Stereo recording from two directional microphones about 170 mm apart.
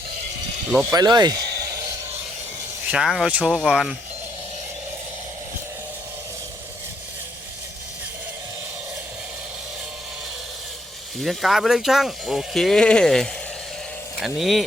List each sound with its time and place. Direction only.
0.7 s speech: centre (ahead or behind)
0.9 s a sound: 25° right (ahead or behind)
2.8 s speech: 5° right (ahead or behind)
11.2 s speech: centre (ahead or behind)